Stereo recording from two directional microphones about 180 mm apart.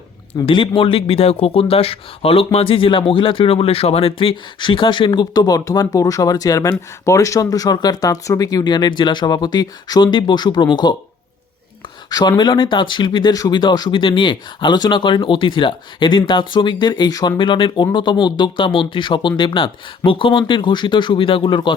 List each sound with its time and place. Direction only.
0.4 s a man's voice: 30° left (ahead or behind)
12.4 s a man's voice: 25° left (ahead or behind)